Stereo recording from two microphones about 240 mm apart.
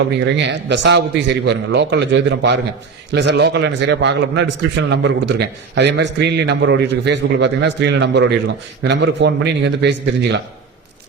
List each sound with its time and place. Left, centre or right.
0.3 s a man's voice: right